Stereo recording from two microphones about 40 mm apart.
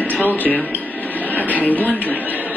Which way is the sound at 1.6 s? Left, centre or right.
Left.